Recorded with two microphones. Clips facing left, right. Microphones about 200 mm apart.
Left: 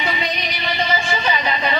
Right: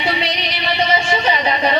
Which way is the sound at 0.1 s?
75° right (ahead or behind).